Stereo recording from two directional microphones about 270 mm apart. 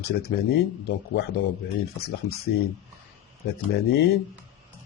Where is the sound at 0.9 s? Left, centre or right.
Left.